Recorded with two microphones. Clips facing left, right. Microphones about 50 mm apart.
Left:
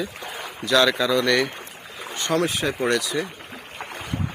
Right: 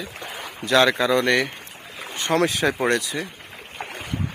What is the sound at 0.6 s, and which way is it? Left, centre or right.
Speech, right.